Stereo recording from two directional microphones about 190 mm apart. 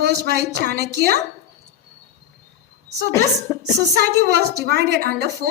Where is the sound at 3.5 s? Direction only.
10° left (ahead or behind).